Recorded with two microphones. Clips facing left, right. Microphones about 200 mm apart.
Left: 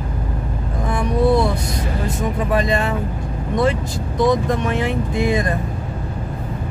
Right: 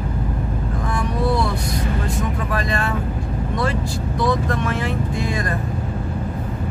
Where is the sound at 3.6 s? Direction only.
20° left (ahead or behind).